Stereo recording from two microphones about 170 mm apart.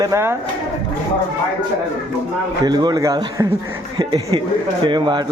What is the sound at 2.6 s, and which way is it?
Speech, 25° right (ahead or behind).